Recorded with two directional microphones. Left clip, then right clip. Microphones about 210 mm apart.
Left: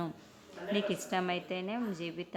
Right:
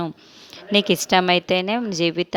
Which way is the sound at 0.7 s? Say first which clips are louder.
Right 16 dB; 50° right (ahead or behind).